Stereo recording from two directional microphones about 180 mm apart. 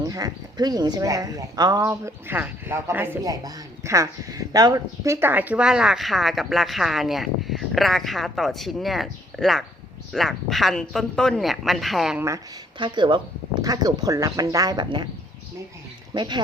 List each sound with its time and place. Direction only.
0.0 s speech: 20° right (ahead or behind); by 12.2 s centre (ahead or behind)
12.8 s speech: 25° right (ahead or behind)
16.1 s speech: 25° right (ahead or behind)